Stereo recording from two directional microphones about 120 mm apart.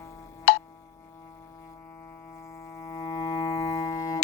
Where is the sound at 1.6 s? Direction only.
25° left (ahead or behind).